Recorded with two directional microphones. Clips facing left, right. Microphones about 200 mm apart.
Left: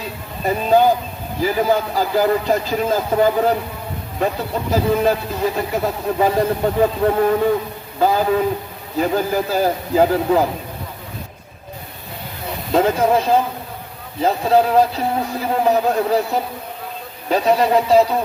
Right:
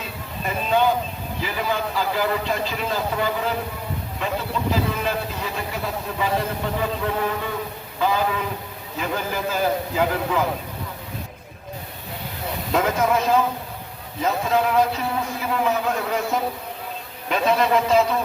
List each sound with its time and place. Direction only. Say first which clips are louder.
0.4 s speech: left 6 dB; 40° left (ahead or behind)
4.7 s speech: left 9 dB; 40° left (ahead or behind)
12.7 s speech: left 5 dB; 30° left (ahead or behind)
17.2 s speech: left 4 dB; 35° left (ahead or behind)